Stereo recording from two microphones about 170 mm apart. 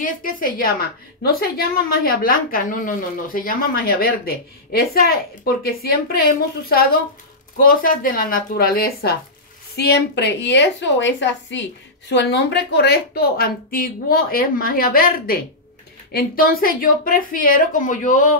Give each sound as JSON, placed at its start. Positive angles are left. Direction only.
{"t": 0.0, "sound": "a woman's voice", "side_deg": 55}
{"t": 9.8, "sound": "a woman's voice", "side_deg": 75}